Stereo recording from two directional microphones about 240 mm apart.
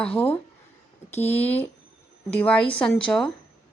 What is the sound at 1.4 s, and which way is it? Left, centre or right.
Speech, centre.